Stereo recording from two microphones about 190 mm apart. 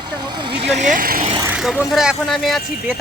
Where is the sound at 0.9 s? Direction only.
50° right (ahead or behind).